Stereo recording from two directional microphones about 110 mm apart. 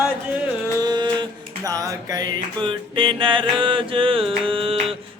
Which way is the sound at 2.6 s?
50° right (ahead or behind).